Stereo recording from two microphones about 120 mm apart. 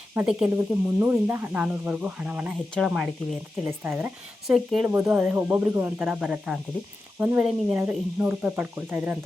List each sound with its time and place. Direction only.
0.3 s speech: 10° right (ahead or behind)
0.5 s speech: 20° right (ahead or behind); by 3.1 s centre (ahead or behind)
3.7 s speech: 20° right (ahead or behind)
4.4 s speech: 5° right (ahead or behind)
4.9 s speech: 15° right (ahead or behind)